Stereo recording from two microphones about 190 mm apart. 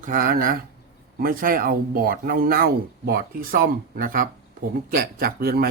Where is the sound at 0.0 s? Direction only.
45° right (ahead or behind).